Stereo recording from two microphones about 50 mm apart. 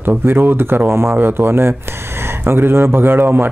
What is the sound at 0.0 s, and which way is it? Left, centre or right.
Speech, right.